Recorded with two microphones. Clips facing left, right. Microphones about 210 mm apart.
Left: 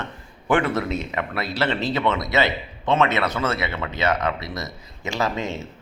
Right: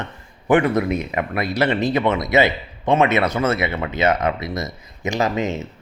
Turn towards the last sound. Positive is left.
turn(degrees=-20)  # may be behind; listen again after turning